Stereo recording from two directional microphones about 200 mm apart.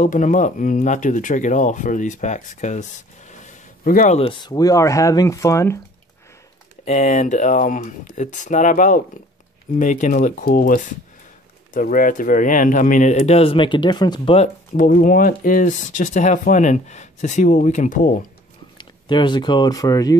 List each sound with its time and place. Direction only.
0.0 s speech: 40° left (ahead or behind); by 5.8 s 15° left (ahead or behind)
6.8 s speech: 35° left (ahead or behind)
14.8 s speech: 40° left (ahead or behind)
18.8 s speech: 25° left (ahead or behind)